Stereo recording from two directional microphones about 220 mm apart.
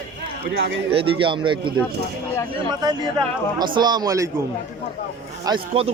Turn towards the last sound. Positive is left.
turn(degrees=-25)  # may be behind; listen again after turning